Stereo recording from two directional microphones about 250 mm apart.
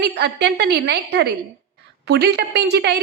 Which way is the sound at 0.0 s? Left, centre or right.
Right.